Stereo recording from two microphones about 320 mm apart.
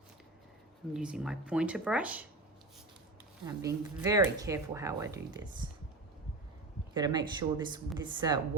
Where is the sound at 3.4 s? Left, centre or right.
Centre.